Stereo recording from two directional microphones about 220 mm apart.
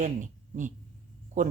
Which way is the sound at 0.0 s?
35° right (ahead or behind).